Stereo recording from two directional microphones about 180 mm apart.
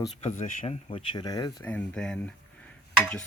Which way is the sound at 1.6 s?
5° left (ahead or behind).